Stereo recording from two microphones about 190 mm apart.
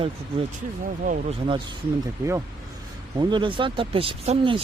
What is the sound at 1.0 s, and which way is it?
Speech, 45° right (ahead or behind).